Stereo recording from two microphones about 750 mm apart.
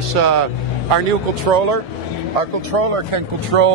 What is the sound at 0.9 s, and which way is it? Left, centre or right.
Speech, right.